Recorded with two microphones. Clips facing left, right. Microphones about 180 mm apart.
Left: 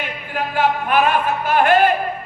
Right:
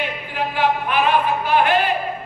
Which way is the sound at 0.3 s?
45° left (ahead or behind).